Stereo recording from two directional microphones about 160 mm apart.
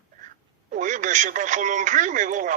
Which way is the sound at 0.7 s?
55° right (ahead or behind).